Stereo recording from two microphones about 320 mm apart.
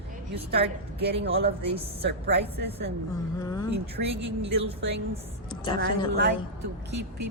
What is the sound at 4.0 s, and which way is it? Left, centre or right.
Speech, right.